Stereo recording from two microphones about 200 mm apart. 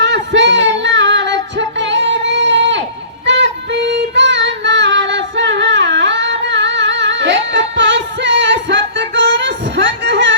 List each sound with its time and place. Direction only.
0.0 s music: 60° right (ahead or behind)
3.2 s female singing: 60° right (ahead or behind)